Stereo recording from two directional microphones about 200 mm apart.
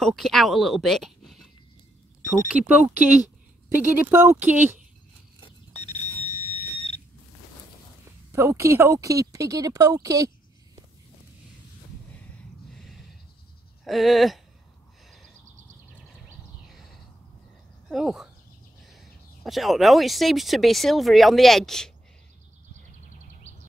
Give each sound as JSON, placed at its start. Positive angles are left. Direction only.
{"t": 0.0, "sound": "speech", "side_deg": 0}
{"t": 5.8, "sound": "alarm clock", "side_deg": 35}
{"t": 8.3, "sound": "speech", "side_deg": -15}
{"t": 12.2, "sound": "a sound", "side_deg": 5}
{"t": 13.8, "sound": "speech", "side_deg": 0}
{"t": 17.8, "sound": "speech", "side_deg": 0}